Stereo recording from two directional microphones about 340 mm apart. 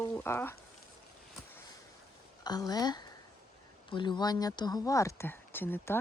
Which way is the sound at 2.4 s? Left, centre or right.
Centre.